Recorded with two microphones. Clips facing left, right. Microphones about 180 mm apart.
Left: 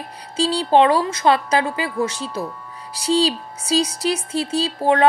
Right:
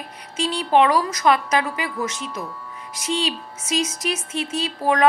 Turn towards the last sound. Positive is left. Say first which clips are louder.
# left 2 dB
turn(degrees=30)  # may be behind; listen again after turning